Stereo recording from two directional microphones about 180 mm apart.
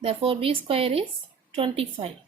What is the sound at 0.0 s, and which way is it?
A woman's voice, 30° right (ahead or behind).